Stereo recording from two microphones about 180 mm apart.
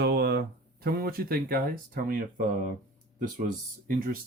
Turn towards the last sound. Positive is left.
turn(degrees=-50)  # may be behind; listen again after turning